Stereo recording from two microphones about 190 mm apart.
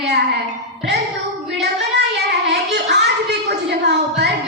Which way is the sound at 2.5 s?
60° right (ahead or behind).